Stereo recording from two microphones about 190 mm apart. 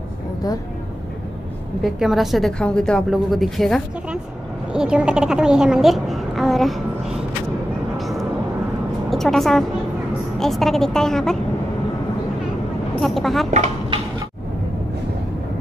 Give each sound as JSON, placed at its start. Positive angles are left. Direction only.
{"t": 1.8, "sound": "a woman's voice", "side_deg": 0}
{"t": 8.0, "sound": "vehicle", "side_deg": 0}
{"t": 9.1, "sound": "a woman's voice", "side_deg": 0}
{"t": 13.0, "sound": "a woman's voice", "side_deg": 0}
{"t": 13.5, "sound": "speech", "side_deg": -35}